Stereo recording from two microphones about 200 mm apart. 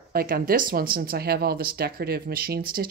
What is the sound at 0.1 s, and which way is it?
Speech, 50° right (ahead or behind).